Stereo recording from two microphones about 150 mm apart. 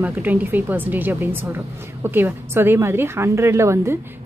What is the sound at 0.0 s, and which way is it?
A woman's voice, 10° right (ahead or behind).